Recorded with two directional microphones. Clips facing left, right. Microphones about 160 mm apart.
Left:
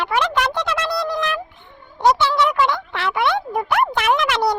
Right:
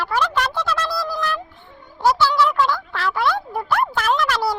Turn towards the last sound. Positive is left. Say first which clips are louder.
# left 2 dB
turn(degrees=20)  # may be behind; listen again after turning